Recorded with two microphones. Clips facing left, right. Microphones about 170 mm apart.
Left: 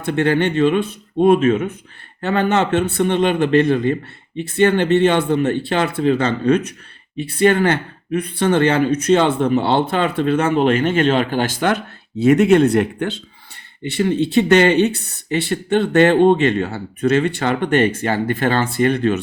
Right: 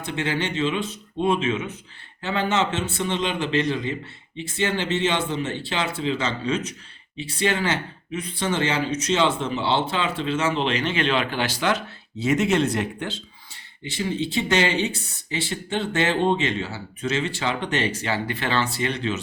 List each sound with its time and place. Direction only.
0.0 s speech: 55° left (ahead or behind)